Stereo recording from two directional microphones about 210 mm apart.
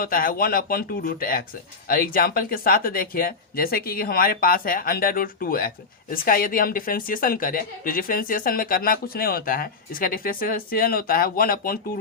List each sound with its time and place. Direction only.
0.0 s speech: 45° left (ahead or behind)